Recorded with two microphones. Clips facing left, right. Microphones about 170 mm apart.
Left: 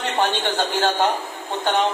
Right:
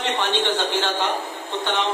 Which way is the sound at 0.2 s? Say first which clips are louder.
Left 4 dB; 45° left (ahead or behind).